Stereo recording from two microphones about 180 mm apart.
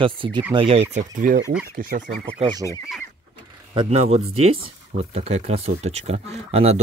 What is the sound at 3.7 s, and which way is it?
Speech, 30° right (ahead or behind).